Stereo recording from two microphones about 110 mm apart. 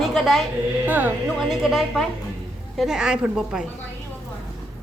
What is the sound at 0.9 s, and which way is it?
Speech, 15° right (ahead or behind).